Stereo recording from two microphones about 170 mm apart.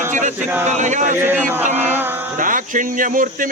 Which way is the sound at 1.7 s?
10° right (ahead or behind).